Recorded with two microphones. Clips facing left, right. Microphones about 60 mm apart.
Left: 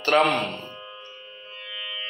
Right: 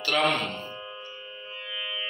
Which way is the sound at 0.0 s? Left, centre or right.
Left.